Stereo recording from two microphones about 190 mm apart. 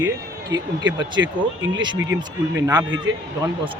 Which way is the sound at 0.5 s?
20° right (ahead or behind).